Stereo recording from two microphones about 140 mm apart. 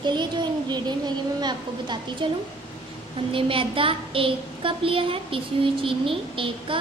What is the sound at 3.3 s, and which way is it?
A woman's voice, 40° right (ahead or behind).